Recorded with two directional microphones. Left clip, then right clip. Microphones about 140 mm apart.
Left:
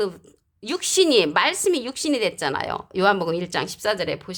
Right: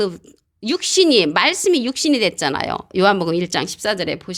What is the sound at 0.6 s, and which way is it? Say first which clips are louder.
Speech: right 4 dB; 25° right (ahead or behind).